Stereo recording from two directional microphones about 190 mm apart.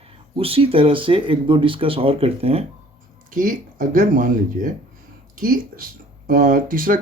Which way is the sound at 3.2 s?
45° right (ahead or behind).